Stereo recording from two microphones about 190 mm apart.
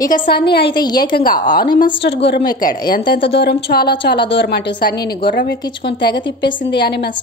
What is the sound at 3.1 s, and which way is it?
A woman's voice, 65° left (ahead or behind).